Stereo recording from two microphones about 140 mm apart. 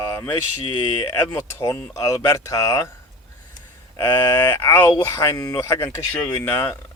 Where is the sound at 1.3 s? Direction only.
25° left (ahead or behind).